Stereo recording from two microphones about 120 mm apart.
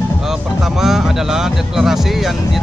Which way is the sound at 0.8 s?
5° right (ahead or behind).